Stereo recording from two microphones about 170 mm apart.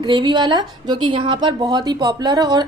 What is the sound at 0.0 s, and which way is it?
A woman's voice, 25° right (ahead or behind).